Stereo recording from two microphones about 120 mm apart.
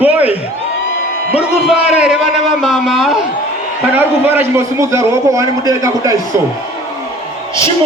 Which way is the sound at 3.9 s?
15° right (ahead or behind).